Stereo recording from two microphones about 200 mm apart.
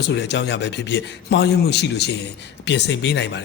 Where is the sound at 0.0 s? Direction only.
60° left (ahead or behind).